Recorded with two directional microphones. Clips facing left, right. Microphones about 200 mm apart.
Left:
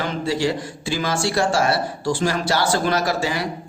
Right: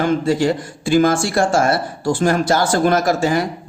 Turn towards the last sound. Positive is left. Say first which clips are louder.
# right 6 dB
turn(degrees=-50)  # may be behind; listen again after turning